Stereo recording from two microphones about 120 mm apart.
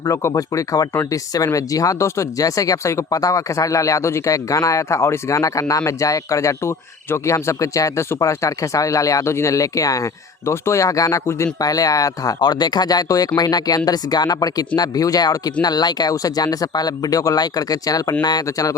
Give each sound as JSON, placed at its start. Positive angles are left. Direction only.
{"t": 0.0, "sound": "speech", "side_deg": 25}